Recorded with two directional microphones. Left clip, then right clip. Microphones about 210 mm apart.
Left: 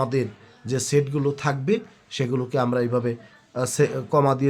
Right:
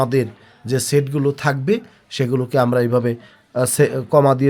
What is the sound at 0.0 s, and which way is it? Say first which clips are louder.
Speech: right 6 dB; 35° right (ahead or behind).